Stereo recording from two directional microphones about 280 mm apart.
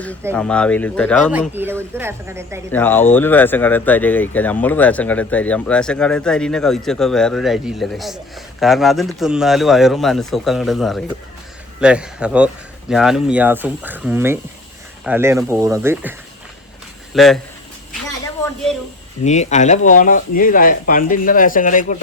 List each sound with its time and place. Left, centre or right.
0.3 s speech: centre
2.7 s speech: centre
17.2 s speech: centre
19.2 s speech: left